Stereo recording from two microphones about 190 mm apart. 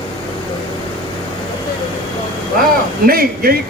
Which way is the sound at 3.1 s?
50° right (ahead or behind).